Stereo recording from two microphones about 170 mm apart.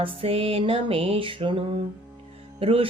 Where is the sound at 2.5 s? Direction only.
35° right (ahead or behind).